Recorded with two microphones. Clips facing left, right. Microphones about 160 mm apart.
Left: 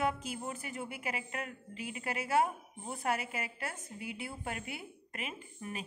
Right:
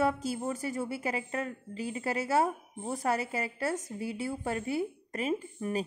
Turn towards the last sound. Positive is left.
turn(degrees=-40)  # may be behind; listen again after turning